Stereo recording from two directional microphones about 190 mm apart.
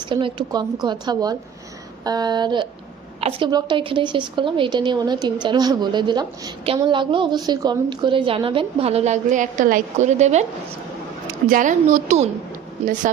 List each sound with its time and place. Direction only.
0.1 s a woman's voice: 25° right (ahead or behind)
11.4 s a woman's voice: 45° right (ahead or behind)